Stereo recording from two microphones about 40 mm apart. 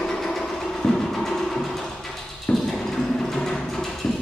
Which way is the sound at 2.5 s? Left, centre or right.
Centre.